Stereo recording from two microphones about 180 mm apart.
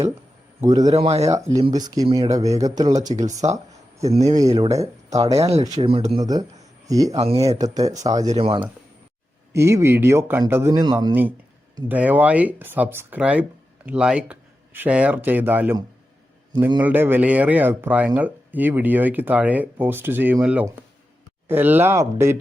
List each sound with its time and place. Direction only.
0.6 s speech: 20° right (ahead or behind)
1.0 s speech: 35° right (ahead or behind)
1.3 s speech: 20° right (ahead or behind)
3.2 s speech: 40° right (ahead or behind)
4.5 s speech: 20° right (ahead or behind)
5.7 s speech: 30° right (ahead or behind)
6.1 s speech: 20° right (ahead or behind)
9.5 s a man's voice: 15° right (ahead or behind)